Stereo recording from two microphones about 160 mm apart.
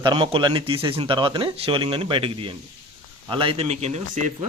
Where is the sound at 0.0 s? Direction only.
30° right (ahead or behind).